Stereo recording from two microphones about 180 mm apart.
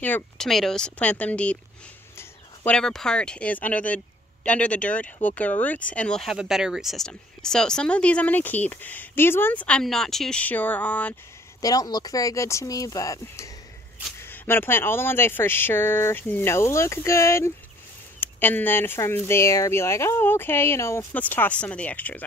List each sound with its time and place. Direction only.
0.0 s speech: 5° left (ahead or behind)
11.6 s speech: 20° left (ahead or behind)